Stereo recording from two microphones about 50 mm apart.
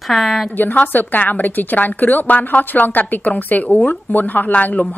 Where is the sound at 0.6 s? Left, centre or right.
Left.